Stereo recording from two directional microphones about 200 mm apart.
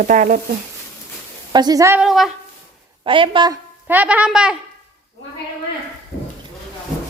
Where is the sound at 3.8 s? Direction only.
10° right (ahead or behind).